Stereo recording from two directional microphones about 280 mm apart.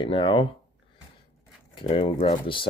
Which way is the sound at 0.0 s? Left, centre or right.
Centre.